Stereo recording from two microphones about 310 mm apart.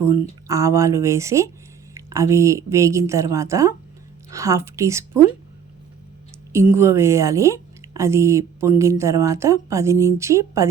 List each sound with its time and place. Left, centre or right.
0.4 s a woman's voice: centre
6.5 s a woman's voice: centre